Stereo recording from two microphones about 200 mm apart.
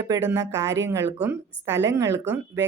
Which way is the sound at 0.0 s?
15° right (ahead or behind).